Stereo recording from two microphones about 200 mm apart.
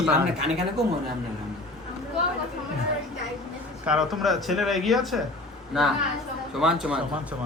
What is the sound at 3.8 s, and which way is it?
Speech, 5° right (ahead or behind).